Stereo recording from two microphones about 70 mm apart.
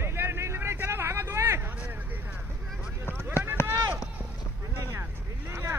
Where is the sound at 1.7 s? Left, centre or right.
Right.